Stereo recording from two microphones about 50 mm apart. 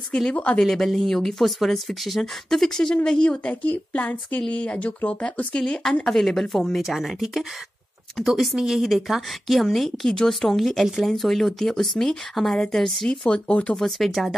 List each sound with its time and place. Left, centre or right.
0.3 s speech: left
0.6 s speech: centre
3.0 s speech: left
5.5 s speech: centre
13.7 s speech: centre